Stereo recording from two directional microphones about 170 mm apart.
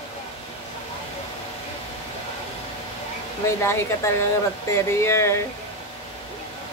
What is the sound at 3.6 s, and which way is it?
Speech, 15° left (ahead or behind).